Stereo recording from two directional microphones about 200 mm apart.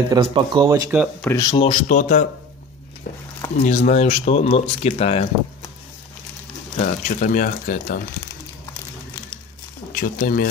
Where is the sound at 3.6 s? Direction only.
40° left (ahead or behind).